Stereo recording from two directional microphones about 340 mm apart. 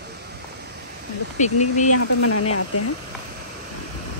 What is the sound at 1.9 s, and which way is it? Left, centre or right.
Speech, left.